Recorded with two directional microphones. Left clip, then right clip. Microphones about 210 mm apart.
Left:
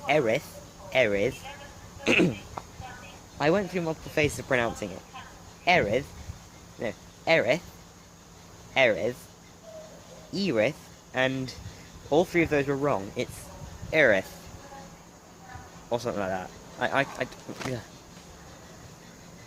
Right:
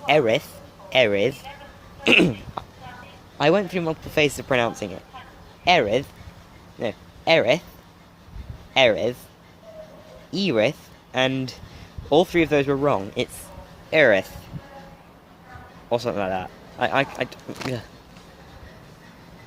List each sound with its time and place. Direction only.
0.1 s speech: 35° right (ahead or behind)
8.7 s speech: 35° right (ahead or behind)
10.3 s speech: 35° right (ahead or behind)
15.9 s speech: 35° right (ahead or behind)